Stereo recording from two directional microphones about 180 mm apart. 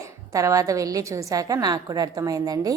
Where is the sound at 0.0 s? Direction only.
15° right (ahead or behind).